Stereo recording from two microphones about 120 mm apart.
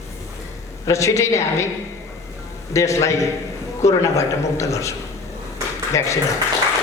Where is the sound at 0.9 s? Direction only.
25° left (ahead or behind).